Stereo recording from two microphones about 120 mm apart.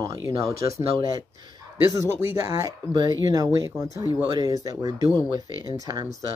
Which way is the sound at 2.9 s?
35° right (ahead or behind).